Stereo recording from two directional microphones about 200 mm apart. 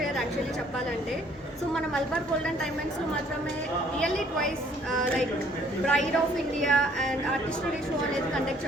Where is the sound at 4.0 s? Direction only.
5° left (ahead or behind).